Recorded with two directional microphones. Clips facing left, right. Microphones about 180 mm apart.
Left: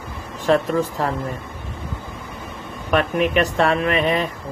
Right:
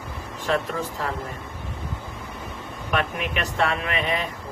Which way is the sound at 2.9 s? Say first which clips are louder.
Left 8 dB; 40° left (ahead or behind).